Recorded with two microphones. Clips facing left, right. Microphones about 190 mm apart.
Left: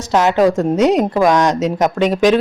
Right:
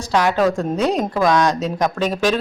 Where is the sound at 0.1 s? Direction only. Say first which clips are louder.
Left 4 dB; 20° left (ahead or behind).